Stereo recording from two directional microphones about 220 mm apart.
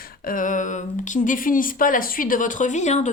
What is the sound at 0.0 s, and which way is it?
Speech, 40° left (ahead or behind).